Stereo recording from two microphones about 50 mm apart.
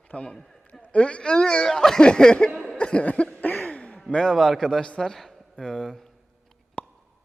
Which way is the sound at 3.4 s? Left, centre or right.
Left.